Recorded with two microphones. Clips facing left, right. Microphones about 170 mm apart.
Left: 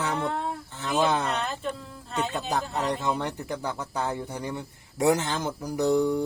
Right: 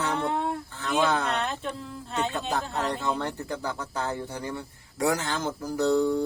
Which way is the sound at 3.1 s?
15° left (ahead or behind).